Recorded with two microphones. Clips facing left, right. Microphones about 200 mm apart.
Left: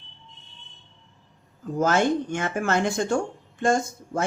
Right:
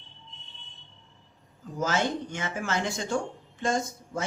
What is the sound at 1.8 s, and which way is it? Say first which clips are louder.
Speech: left 6 dB; 55° left (ahead or behind).